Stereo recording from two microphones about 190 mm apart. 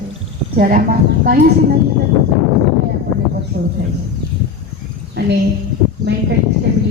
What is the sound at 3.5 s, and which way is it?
Speech, 50° right (ahead or behind).